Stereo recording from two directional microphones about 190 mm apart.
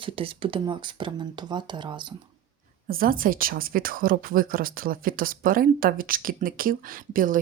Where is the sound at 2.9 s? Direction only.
50° right (ahead or behind).